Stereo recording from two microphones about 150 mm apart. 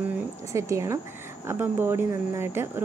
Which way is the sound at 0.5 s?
20° right (ahead or behind).